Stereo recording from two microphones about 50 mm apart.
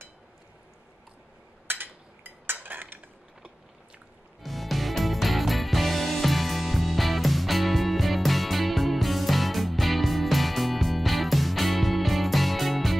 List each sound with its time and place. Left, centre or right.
1.7 s dishes: right
4.4 s music: centre